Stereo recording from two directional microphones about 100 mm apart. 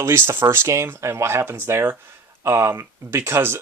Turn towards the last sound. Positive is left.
turn(degrees=-25)  # may be behind; listen again after turning